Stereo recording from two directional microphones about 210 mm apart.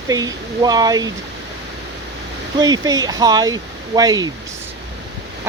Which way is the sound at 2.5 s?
20° right (ahead or behind).